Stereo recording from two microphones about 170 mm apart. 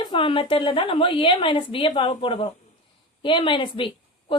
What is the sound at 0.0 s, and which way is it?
A woman's voice, 30° left (ahead or behind).